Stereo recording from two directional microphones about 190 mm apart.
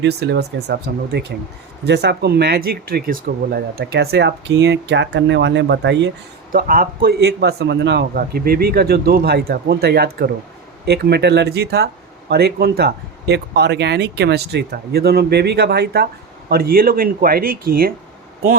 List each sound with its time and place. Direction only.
0.0 s speech: 60° right (ahead or behind)
6.5 s speech: 45° right (ahead or behind)